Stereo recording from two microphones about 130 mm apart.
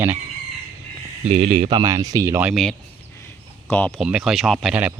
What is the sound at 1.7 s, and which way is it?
Speech, 30° right (ahead or behind).